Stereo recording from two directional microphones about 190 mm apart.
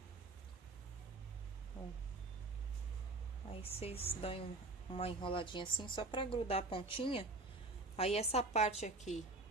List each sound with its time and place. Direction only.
3.6 s a woman's voice: 30° left (ahead or behind)